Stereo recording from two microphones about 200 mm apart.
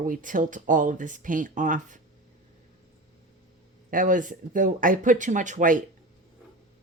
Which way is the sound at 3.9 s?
40° right (ahead or behind).